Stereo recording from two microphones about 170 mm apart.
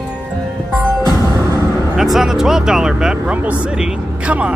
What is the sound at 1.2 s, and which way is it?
Music, 20° right (ahead or behind).